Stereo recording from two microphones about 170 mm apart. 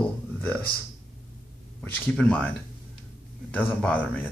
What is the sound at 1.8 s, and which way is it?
Speech, 5° left (ahead or behind).